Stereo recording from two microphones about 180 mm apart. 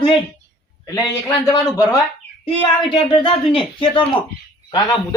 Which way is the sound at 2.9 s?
25° left (ahead or behind).